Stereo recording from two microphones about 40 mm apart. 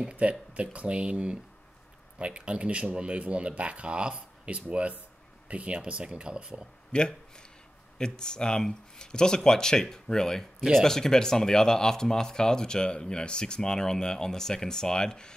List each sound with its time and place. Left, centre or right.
0.1 s speech: right
5.8 s speech: right
6.9 s speech: centre